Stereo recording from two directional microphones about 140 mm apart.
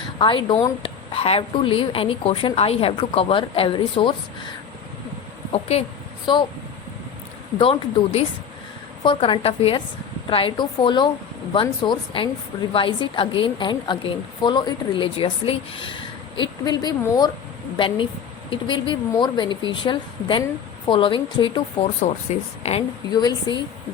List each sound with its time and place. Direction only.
0.2 s a woman's voice: 35° left (ahead or behind)
5.5 s a woman's voice: 45° left (ahead or behind)
6.3 s a woman's voice: 35° left (ahead or behind)
7.6 s a woman's voice: 40° left (ahead or behind)
16.4 s a woman's voice: 30° left (ahead or behind)
22.0 s speech: 50° left (ahead or behind)
23.1 s a woman's voice: 30° left (ahead or behind)